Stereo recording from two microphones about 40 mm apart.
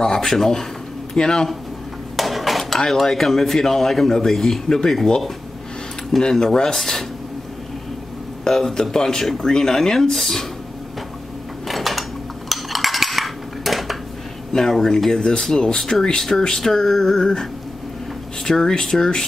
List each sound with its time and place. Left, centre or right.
0.0 s speech: centre
2.1 s dishes: centre
2.9 s speech: centre
6.3 s speech: centre
8.5 s speech: centre
11.6 s a sound: centre
12.4 s dishes: centre
14.5 s speech: centre
18.6 s speech: centre